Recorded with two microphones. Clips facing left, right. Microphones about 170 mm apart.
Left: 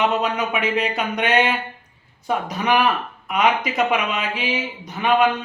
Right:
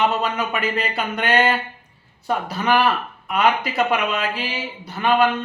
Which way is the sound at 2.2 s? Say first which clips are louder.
Even; centre (ahead or behind).